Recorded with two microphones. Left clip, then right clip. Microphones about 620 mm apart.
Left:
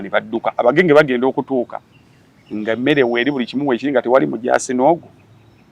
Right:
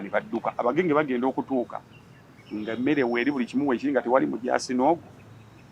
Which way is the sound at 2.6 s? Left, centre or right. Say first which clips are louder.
Left 10 dB; left.